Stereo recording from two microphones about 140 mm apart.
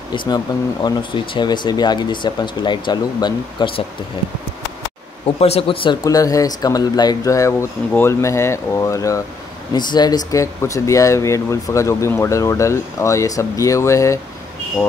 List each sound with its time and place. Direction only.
0.8 s speech: 35° left (ahead or behind)
5.2 s speech: 45° left (ahead or behind)
6.0 s speech: 25° left (ahead or behind)